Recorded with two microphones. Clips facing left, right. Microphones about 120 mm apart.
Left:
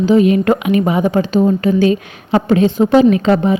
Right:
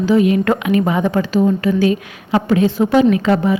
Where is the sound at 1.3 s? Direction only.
25° left (ahead or behind).